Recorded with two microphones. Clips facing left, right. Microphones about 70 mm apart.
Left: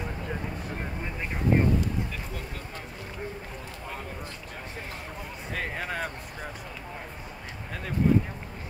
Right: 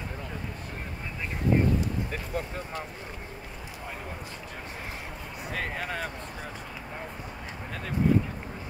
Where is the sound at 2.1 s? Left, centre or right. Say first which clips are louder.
Right 4 dB; right.